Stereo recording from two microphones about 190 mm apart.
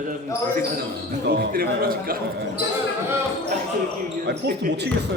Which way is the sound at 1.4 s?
50° right (ahead or behind).